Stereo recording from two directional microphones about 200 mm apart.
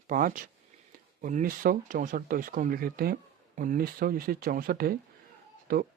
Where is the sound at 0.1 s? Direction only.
45° right (ahead or behind).